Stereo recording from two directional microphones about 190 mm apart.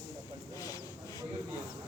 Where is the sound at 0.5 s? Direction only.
20° left (ahead or behind).